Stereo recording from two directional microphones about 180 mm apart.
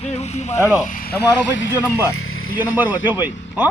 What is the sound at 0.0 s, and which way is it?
Boat, 35° left (ahead or behind).